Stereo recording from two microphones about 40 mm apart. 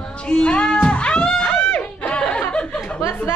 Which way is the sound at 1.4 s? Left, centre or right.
Left.